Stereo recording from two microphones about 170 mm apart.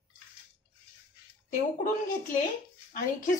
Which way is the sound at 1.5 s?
50° left (ahead or behind).